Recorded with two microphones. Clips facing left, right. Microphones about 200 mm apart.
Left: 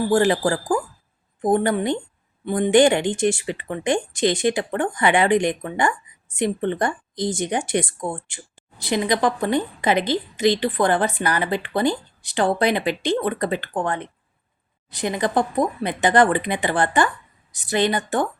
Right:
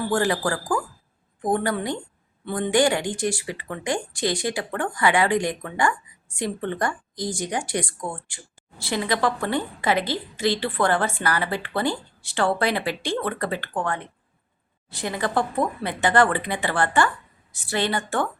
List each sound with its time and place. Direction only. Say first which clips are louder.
0.1 s speech: left 5 dB; 25° left (ahead or behind)